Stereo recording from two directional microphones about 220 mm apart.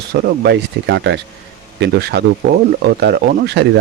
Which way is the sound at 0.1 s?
50° right (ahead or behind).